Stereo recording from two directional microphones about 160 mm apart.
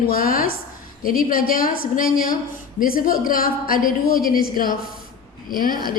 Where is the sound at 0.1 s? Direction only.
65° left (ahead or behind).